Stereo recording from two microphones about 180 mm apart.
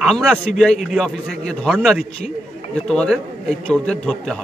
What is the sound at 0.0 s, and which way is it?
A man's voice, centre (ahead or behind).